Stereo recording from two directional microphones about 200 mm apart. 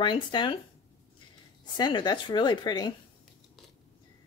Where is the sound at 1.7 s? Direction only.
20° left (ahead or behind).